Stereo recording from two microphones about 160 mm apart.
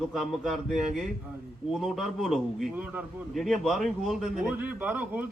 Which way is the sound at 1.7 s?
Centre (ahead or behind).